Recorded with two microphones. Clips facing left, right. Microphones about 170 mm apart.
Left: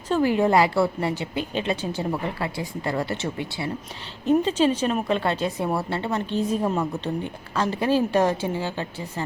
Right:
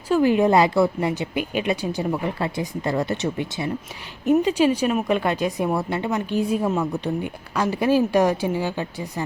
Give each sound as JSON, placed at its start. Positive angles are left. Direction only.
{"t": 0.1, "sound": "a woman's voice", "side_deg": -20}